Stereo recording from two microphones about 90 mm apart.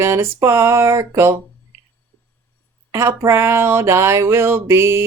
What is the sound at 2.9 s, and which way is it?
Speech, 30° right (ahead or behind).